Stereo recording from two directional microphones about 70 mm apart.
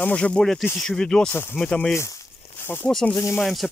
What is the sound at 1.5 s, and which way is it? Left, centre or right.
Speech, centre.